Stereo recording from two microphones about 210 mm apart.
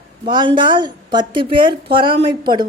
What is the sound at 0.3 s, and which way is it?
A woman's voice, 20° right (ahead or behind).